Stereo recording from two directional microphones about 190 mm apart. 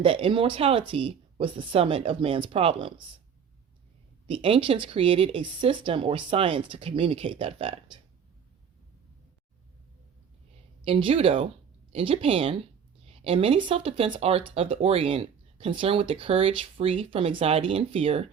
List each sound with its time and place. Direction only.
0.0 s speech: 30° right (ahead or behind)
4.3 s speech: 30° right (ahead or behind)
10.8 s speech: 30° right (ahead or behind)